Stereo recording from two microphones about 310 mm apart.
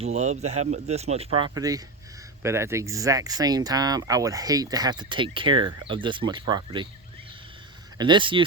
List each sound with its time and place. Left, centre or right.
0.0 s speech: right
7.9 s speech: centre